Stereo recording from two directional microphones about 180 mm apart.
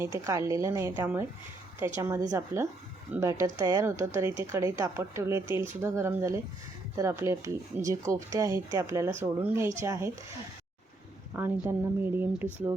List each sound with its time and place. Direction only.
0.0 s a woman's voice: 15° right (ahead or behind)
11.3 s a woman's voice: 15° right (ahead or behind)